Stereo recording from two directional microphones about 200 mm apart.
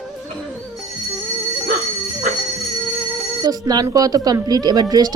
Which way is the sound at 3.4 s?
20° right (ahead or behind).